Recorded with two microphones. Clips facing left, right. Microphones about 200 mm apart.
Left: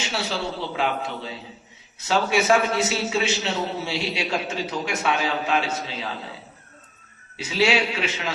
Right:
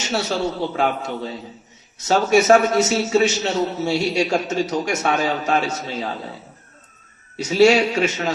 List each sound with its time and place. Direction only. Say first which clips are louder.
0.0 s a man's voice: right 6 dB; 45° right (ahead or behind)
7.3 s a man's voice: right 8 dB; 45° right (ahead or behind)